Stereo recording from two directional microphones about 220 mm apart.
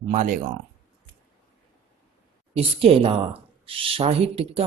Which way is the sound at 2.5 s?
25° right (ahead or behind).